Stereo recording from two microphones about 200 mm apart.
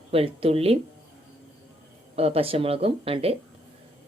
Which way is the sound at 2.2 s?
30° right (ahead or behind).